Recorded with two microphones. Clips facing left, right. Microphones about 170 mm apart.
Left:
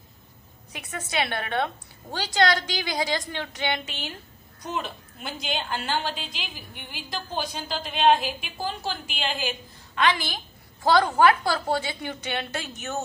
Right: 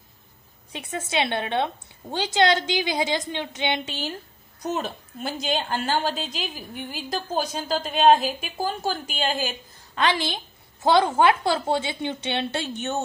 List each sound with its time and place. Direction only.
0.7 s a woman's voice: 25° right (ahead or behind)
4.6 s a woman's voice: 40° right (ahead or behind)
9.9 s a woman's voice: 30° right (ahead or behind)